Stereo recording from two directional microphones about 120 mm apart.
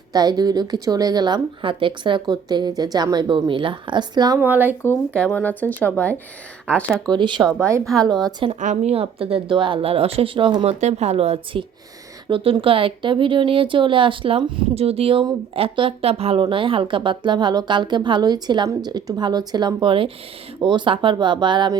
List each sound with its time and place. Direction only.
0.1 s speech: 35° right (ahead or behind)
4.4 s speech: 15° right (ahead or behind)
4.8 s speech: 15° left (ahead or behind)
7.0 s speech: 40° right (ahead or behind)
8.6 s speech: 70° right (ahead or behind); by 10.7 s 40° right (ahead or behind)
10.7 s speech: 70° right (ahead or behind)
12.3 s speech: 50° right (ahead or behind)